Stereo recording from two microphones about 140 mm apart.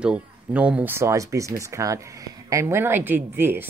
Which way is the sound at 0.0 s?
10° right (ahead or behind).